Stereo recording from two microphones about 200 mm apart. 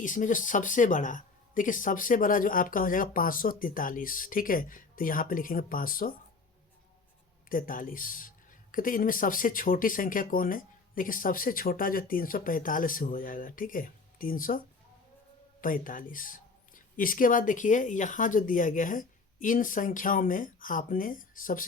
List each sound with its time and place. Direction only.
0.0 s speech: 40° left (ahead or behind)
7.5 s speech: 45° left (ahead or behind)
15.6 s speech: 45° left (ahead or behind)